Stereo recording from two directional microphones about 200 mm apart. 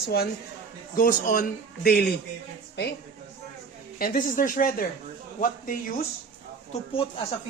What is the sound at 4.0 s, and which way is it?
A man's voice, 45° left (ahead or behind).